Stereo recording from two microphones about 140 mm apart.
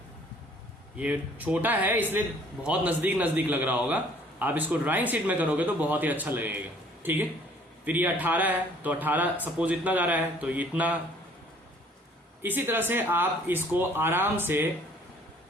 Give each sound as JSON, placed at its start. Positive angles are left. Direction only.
{"t": 0.9, "sound": "speech", "side_deg": -10}
{"t": 12.4, "sound": "speech", "side_deg": -15}